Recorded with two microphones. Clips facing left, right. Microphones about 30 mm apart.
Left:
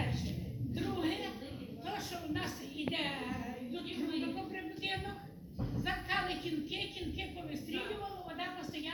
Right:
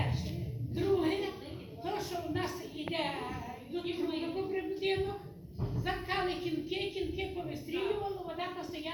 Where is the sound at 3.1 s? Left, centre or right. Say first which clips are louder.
Right 1 dB; right.